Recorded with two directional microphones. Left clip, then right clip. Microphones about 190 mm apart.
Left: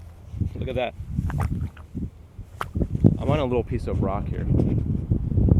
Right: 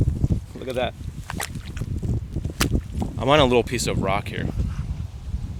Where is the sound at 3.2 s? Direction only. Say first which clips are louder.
Right 12 dB; 50° right (ahead or behind).